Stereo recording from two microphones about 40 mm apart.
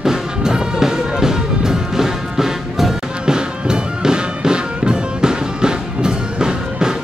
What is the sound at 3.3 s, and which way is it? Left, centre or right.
Music, right.